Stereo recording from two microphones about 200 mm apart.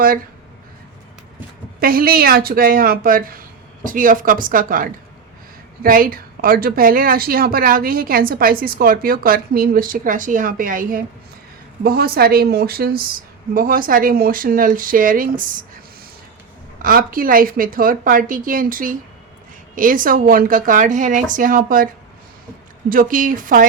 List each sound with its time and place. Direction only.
1.8 s a woman's voice: 45° right (ahead or behind)
16.8 s a woman's voice: 45° right (ahead or behind)
22.9 s a woman's voice: 40° right (ahead or behind)